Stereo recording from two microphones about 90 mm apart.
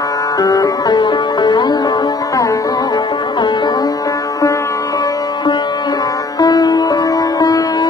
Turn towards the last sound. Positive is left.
turn(degrees=45)  # may be behind; listen again after turning